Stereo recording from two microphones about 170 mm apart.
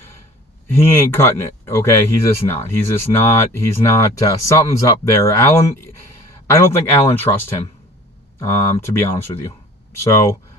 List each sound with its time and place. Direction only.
0.7 s speech: 15° left (ahead or behind)